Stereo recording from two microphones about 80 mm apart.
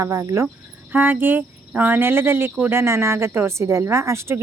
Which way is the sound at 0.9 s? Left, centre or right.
Right.